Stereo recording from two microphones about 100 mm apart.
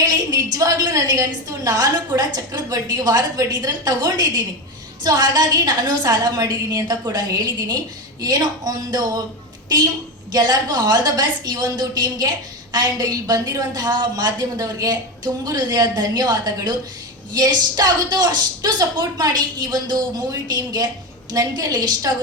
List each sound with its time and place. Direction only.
0.1 s a woman's voice: 40° right (ahead or behind)
10.3 s a woman's voice: 45° right (ahead or behind)